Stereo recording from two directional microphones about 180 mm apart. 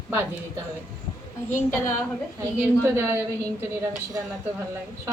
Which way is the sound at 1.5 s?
10° left (ahead or behind).